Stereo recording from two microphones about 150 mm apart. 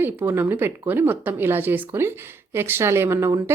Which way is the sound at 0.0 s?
15° right (ahead or behind).